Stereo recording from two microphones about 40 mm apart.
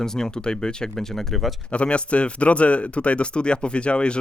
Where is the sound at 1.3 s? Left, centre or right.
Centre.